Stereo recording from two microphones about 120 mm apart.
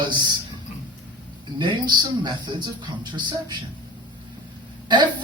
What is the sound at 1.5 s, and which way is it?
Speech, 35° right (ahead or behind).